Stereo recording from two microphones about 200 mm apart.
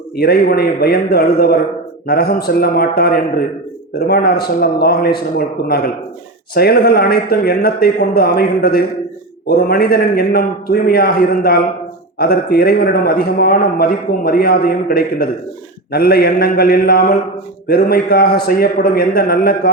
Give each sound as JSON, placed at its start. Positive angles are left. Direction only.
{"t": 0.2, "sound": "a man's voice", "side_deg": 50}